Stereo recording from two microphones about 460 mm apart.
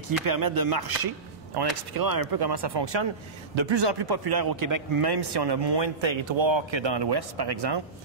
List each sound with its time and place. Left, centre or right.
0.2 s a man's voice: right